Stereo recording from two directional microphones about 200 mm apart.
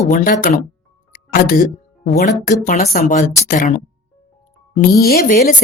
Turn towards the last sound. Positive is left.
turn(degrees=45)  # may be behind; listen again after turning